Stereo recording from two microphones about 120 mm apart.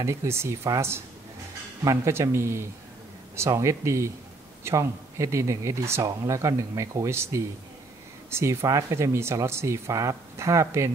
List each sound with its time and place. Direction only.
0.0 s speech: 25° right (ahead or behind)